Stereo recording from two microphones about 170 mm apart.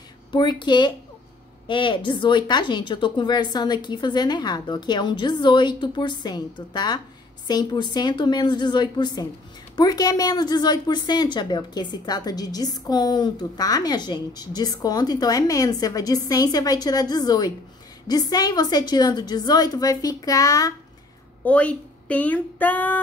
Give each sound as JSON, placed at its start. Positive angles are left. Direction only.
{"t": 0.3, "sound": "a woman's voice", "side_deg": 25}
{"t": 21.5, "sound": "speech", "side_deg": 10}